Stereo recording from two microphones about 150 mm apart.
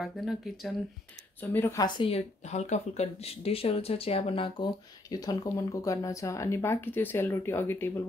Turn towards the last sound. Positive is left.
turn(degrees=15)  # may be behind; listen again after turning